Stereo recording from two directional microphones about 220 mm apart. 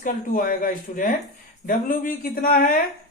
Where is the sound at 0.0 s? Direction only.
40° left (ahead or behind).